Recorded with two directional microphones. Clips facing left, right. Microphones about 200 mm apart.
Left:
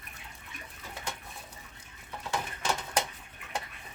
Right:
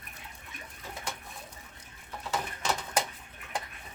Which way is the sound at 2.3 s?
Centre (ahead or behind).